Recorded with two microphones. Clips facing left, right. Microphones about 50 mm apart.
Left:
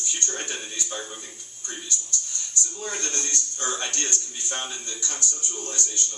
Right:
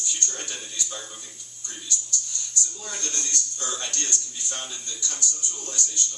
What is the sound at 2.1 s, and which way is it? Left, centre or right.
Speech, left.